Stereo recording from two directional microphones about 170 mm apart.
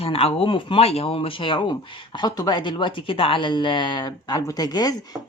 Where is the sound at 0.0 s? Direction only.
35° left (ahead or behind).